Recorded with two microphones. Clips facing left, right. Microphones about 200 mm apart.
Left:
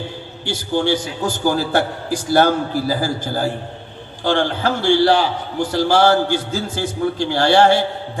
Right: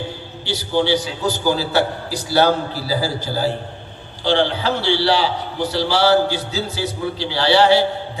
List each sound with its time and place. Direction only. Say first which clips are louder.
0.4 s a man's voice: even; 50° left (ahead or behind)